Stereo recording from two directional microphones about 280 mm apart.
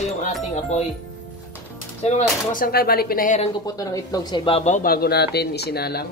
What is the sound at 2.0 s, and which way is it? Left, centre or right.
Speech, left.